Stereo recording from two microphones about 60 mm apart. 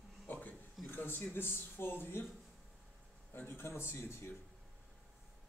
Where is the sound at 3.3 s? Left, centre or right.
Left.